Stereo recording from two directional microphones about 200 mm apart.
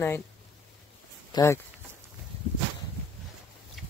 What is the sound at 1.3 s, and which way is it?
Speech, 15° left (ahead or behind).